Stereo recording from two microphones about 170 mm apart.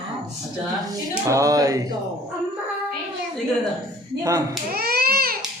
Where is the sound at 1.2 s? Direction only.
20° right (ahead or behind).